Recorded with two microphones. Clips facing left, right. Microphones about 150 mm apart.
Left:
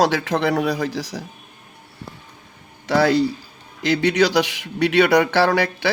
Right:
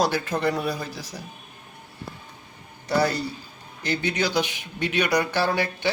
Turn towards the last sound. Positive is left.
turn(degrees=80)